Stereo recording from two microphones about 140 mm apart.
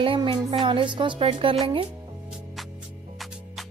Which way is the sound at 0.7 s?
35° right (ahead or behind).